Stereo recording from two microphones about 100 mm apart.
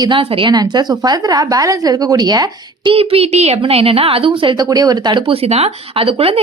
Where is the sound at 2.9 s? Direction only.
75° right (ahead or behind).